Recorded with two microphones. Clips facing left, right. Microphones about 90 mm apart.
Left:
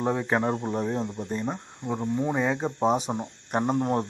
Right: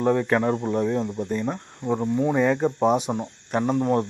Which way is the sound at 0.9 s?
30° left (ahead or behind).